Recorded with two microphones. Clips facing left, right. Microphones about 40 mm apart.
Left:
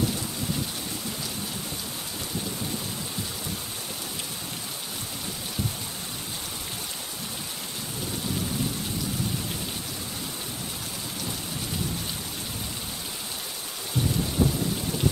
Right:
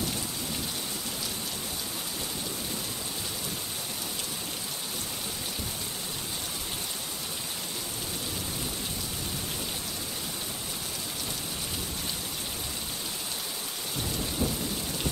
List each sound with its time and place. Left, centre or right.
14.4 s rain: centre